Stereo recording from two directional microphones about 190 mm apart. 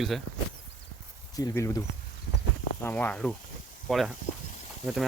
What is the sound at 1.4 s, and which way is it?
Speech, 15° left (ahead or behind).